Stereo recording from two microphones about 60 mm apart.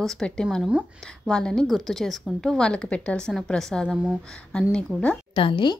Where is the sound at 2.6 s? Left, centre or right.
Centre.